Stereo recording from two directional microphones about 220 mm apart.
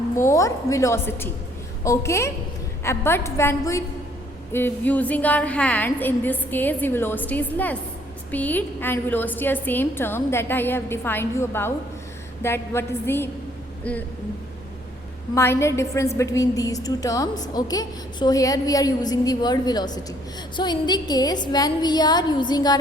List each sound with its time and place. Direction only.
0.2 s a woman's voice: 15° left (ahead or behind)
15.4 s a woman's voice: 10° left (ahead or behind)